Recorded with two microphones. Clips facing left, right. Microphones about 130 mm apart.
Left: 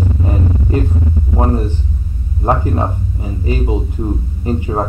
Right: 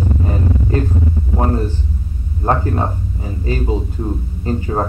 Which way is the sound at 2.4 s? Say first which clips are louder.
Left 1 dB; 10° left (ahead or behind).